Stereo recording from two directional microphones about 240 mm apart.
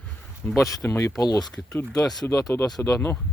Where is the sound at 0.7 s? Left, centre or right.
Centre.